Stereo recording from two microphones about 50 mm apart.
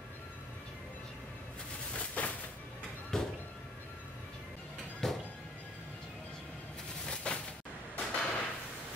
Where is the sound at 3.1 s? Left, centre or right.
Centre.